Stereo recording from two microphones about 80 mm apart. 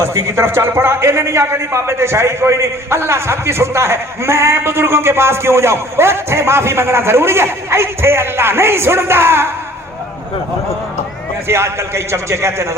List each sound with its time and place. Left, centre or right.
0.0 s a man's voice: right
11.4 s a man's voice: right